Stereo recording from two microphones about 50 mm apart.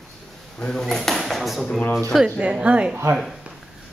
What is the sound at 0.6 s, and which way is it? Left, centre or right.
Speech, centre.